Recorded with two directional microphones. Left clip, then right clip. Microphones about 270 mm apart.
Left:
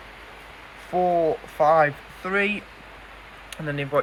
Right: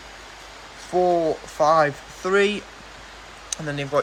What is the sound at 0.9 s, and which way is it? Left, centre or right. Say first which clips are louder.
Speech: right 1 dB; centre.